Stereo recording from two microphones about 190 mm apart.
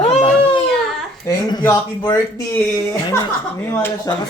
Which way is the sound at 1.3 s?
20° left (ahead or behind).